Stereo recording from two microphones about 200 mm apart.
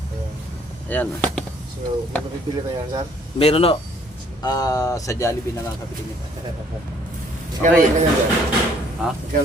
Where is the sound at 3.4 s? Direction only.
30° left (ahead or behind).